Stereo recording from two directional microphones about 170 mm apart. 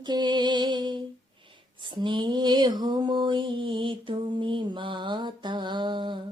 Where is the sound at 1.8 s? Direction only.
25° right (ahead or behind).